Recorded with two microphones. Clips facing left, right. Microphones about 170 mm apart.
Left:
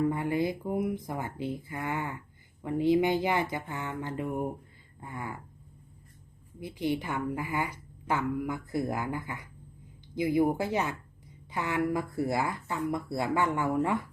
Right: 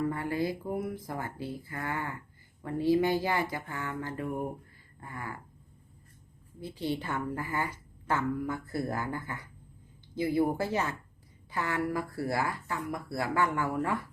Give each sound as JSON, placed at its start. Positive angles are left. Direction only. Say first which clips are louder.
{"t": 0.1, "sound": "speech", "louder": "left 2 dB", "side_deg": 20}
{"t": 4.9, "sound": "a sound", "louder": "left 2 dB", "side_deg": 20}
{"t": 6.6, "sound": "a woman's voice", "louder": "left 3 dB", "side_deg": 15}